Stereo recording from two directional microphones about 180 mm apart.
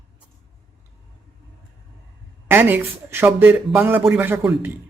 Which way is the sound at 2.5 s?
10° right (ahead or behind).